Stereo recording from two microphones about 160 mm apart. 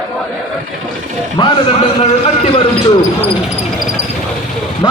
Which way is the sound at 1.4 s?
25° left (ahead or behind).